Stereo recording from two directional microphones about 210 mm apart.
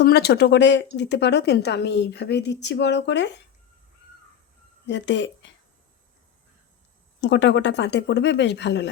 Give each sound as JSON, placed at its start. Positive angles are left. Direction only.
{"t": 0.0, "sound": "speech", "side_deg": 50}
{"t": 4.9, "sound": "speech", "side_deg": 55}
{"t": 7.2, "sound": "speech", "side_deg": 55}